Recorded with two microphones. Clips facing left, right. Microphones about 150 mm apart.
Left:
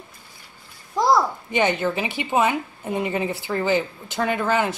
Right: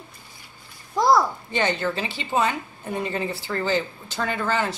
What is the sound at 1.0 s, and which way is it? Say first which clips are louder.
Speech: even; 20° left (ahead or behind).